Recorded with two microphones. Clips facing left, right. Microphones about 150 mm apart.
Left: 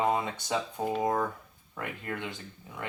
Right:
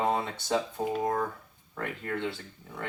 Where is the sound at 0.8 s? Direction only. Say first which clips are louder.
Even; 5° right (ahead or behind).